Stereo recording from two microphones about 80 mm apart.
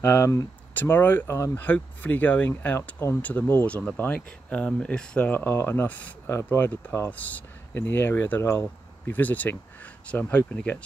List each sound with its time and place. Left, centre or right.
0.0 s speech: left
1.2 s speech: left
1.5 s speech: left
5.3 s speech: left
5.9 s speech: centre
6.2 s speech: left
7.1 s speech: left
8.4 s speech: left
9.1 s speech: left